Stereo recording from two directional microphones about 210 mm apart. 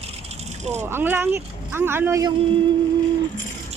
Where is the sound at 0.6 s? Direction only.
30° right (ahead or behind).